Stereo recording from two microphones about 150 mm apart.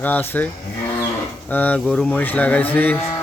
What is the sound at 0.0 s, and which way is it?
Speech, 10° left (ahead or behind).